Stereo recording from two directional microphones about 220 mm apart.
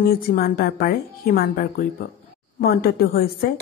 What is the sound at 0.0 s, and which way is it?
A woman's voice, 40° left (ahead or behind).